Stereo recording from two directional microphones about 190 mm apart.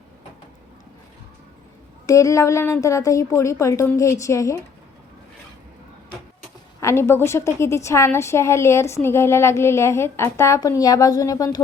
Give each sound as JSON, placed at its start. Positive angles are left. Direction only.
{"t": 2.0, "sound": "a woman's voice", "side_deg": 15}
{"t": 6.7, "sound": "a woman's voice", "side_deg": 15}